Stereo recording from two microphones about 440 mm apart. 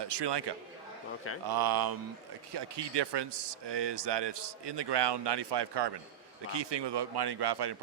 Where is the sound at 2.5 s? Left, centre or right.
Right.